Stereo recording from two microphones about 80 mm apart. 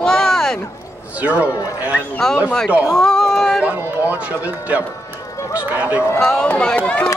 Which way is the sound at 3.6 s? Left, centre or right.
Centre.